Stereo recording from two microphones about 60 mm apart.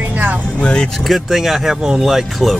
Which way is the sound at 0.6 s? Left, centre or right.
Centre.